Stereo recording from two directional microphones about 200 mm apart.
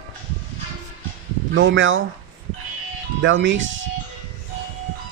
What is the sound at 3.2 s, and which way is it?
Speech, 70° right (ahead or behind).